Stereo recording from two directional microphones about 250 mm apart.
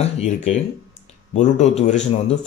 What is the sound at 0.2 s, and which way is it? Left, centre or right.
Speech, left.